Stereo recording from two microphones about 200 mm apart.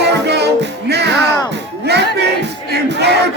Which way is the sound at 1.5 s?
55° right (ahead or behind).